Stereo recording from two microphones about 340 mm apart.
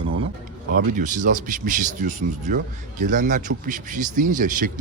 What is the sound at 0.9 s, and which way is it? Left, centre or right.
Speech, right.